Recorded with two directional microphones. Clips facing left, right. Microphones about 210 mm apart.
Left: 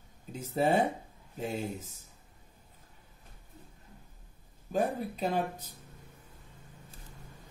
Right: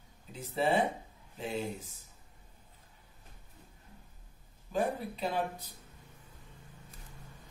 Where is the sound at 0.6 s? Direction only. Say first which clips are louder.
Left 2 dB; 45° left (ahead or behind).